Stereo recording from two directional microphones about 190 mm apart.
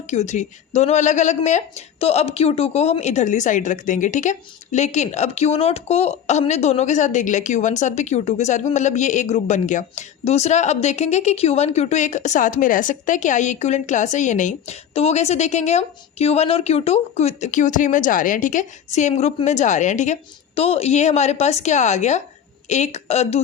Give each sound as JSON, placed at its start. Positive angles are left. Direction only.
{"t": 0.1, "sound": "a woman's voice", "side_deg": 35}